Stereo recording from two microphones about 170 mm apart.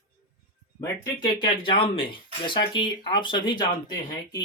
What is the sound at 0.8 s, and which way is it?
Speech, 15° left (ahead or behind).